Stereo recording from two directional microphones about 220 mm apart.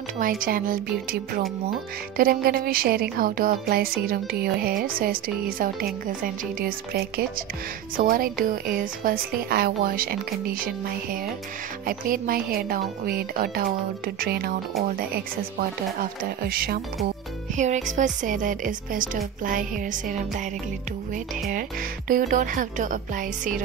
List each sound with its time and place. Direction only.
0.2 s speech: 40° right (ahead or behind)
21.5 s speech: 40° right (ahead or behind)